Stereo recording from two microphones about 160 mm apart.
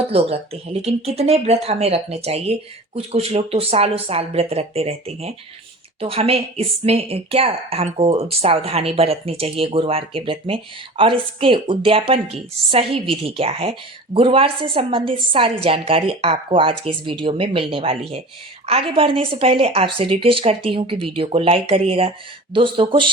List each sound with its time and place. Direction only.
0.1 s speech: 40° right (ahead or behind)